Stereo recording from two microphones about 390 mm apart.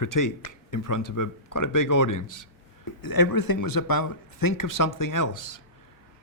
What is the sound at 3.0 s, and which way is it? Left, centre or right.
Speech, left.